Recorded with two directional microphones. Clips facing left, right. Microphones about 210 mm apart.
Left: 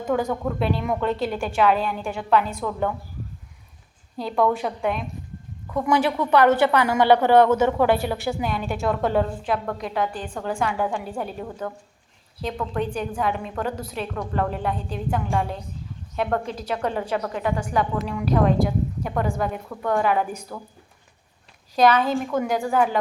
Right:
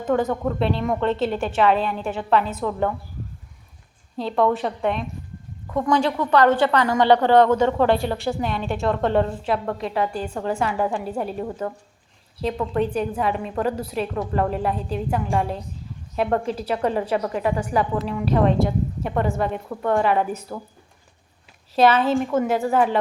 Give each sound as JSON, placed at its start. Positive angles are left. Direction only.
{"t": 0.0, "sound": "a woman's voice", "side_deg": 0}
{"t": 4.2, "sound": "a woman's voice", "side_deg": 0}
{"t": 21.8, "sound": "a woman's voice", "side_deg": -5}